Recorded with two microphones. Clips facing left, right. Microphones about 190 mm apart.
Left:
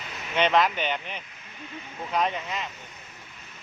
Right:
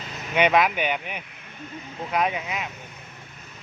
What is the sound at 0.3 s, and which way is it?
Speech, 10° right (ahead or behind).